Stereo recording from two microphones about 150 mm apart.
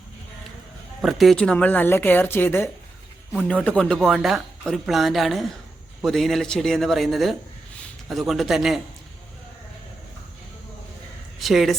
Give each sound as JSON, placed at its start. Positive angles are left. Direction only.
{"t": 1.0, "sound": "speech", "side_deg": 0}
{"t": 11.3, "sound": "speech", "side_deg": 0}